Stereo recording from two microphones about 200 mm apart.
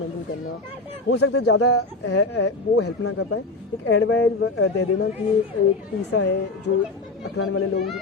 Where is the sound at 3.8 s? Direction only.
65° left (ahead or behind).